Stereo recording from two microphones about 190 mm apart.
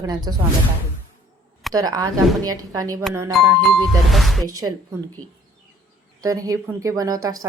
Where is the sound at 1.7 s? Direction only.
20° right (ahead or behind).